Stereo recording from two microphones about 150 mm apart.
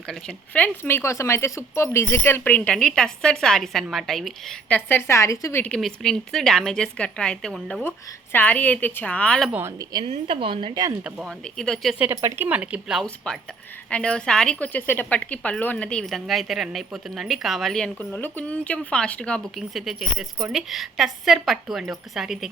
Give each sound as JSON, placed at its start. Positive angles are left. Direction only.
{"t": 0.1, "sound": "speech", "side_deg": 5}
{"t": 4.9, "sound": "a woman's voice", "side_deg": 15}
{"t": 9.5, "sound": "speech", "side_deg": -15}
{"t": 10.0, "sound": "a woman's voice", "side_deg": -40}
{"t": 11.0, "sound": "a woman's voice", "side_deg": -5}
{"t": 11.9, "sound": "a woman's voice", "side_deg": -15}